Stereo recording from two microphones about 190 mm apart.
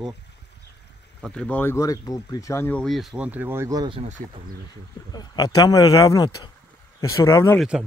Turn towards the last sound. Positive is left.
turn(degrees=15)  # may be behind; listen again after turning